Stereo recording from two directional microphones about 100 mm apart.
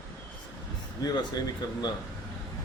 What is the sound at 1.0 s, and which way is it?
Speech, 45° left (ahead or behind).